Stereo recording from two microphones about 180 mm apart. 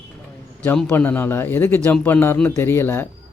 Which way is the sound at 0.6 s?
5° left (ahead or behind).